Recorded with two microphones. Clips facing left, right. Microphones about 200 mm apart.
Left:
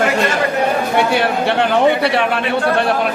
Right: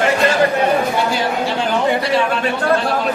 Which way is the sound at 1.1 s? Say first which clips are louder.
Left 3 dB; 65° left (ahead or behind).